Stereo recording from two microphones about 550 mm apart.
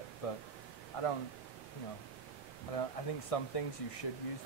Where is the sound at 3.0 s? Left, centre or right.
Left.